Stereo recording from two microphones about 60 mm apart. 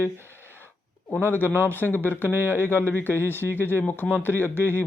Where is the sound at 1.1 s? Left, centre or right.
Left.